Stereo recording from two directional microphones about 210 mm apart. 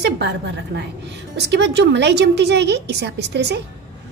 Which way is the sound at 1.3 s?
55° right (ahead or behind).